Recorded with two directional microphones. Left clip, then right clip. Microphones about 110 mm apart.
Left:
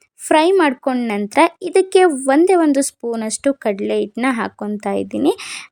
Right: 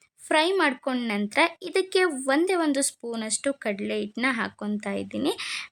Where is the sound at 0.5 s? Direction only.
30° left (ahead or behind).